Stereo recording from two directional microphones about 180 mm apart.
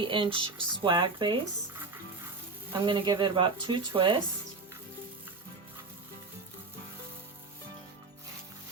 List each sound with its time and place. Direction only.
0.0 s speech: 30° right (ahead or behind)
2.8 s speech: 25° right (ahead or behind)